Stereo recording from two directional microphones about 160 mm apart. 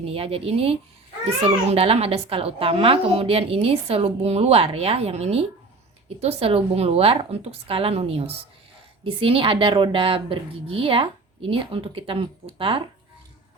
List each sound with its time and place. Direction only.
0.0 s a child's voice: 40° right (ahead or behind)